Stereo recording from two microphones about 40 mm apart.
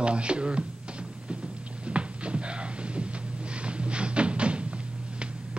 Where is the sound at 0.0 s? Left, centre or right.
Right.